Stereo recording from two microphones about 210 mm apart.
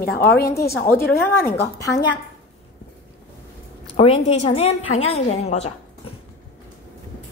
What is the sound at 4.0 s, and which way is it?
A woman's voice, 25° left (ahead or behind).